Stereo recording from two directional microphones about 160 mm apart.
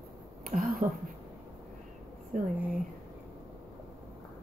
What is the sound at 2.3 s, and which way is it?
Speech, 55° right (ahead or behind).